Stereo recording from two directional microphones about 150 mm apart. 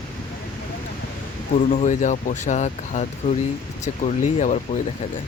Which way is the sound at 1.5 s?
55° left (ahead or behind).